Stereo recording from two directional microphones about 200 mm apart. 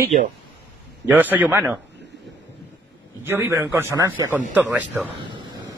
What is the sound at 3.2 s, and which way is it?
A man's voice, 10° right (ahead or behind).